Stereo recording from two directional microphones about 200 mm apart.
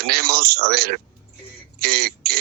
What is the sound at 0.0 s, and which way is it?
A man's voice, 50° right (ahead or behind).